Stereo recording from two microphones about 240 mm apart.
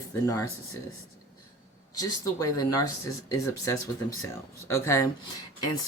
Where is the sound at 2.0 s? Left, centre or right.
Centre.